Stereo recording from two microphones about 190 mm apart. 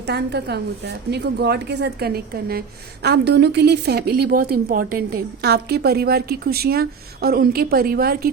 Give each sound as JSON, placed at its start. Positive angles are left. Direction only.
{"t": 0.1, "sound": "a woman's voice", "side_deg": -60}